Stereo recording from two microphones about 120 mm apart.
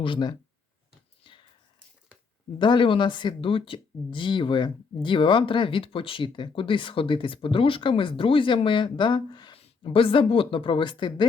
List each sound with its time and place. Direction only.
0.0 s speech: 40° left (ahead or behind)
1.2 s a sound: 40° left (ahead or behind)
2.6 s speech: 40° left (ahead or behind)
9.6 s speech: 55° left (ahead or behind)